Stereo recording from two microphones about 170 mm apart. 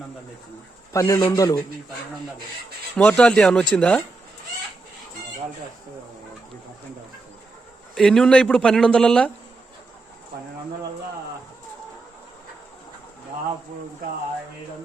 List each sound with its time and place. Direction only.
0.9 s speech: 20° left (ahead or behind)
2.9 s speech: 5° left (ahead or behind)
7.9 s speech: 5° left (ahead or behind)